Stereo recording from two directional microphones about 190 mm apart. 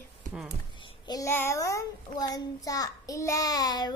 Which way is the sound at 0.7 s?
25° left (ahead or behind).